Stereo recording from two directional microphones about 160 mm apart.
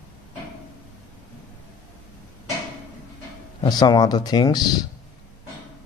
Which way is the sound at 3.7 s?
25° left (ahead or behind).